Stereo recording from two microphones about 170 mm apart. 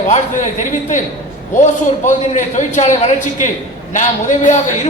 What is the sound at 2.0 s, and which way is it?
A man's voice, 45° left (ahead or behind).